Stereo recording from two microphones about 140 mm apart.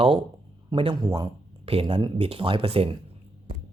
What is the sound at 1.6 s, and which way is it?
Speech, 40° right (ahead or behind).